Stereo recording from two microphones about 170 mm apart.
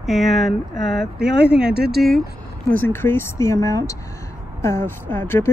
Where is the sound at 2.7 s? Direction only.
10° left (ahead or behind).